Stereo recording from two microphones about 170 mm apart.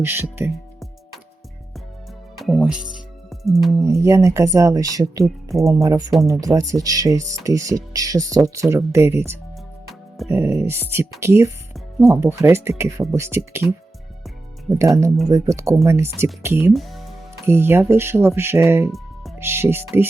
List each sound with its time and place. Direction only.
0.0 s speech: 15° right (ahead or behind)
2.4 s speech: centre (ahead or behind)
3.2 s music: centre (ahead or behind)
3.8 s speech: 20° right (ahead or behind)
14.7 s speech: 20° right (ahead or behind)
16.7 s music: centre (ahead or behind)
17.4 s speech: 15° right (ahead or behind)
18.9 s music: centre (ahead or behind)
19.4 s speech: 15° right (ahead or behind)